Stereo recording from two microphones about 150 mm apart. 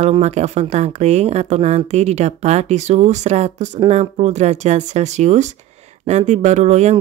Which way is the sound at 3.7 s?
40° right (ahead or behind).